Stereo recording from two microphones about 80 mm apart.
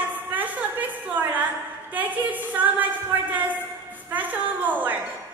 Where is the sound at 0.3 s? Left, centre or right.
Right.